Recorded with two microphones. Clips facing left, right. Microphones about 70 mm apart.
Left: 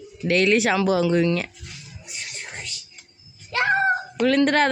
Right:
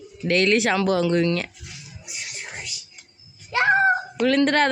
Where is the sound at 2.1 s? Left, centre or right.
Centre.